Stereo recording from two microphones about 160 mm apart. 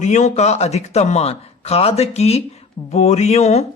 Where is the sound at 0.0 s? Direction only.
45° left (ahead or behind).